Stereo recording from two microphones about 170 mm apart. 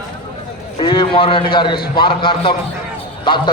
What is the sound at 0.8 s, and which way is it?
A man's voice, 30° left (ahead or behind).